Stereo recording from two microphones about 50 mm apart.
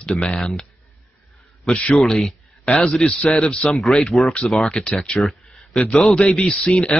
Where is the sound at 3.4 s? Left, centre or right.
Centre.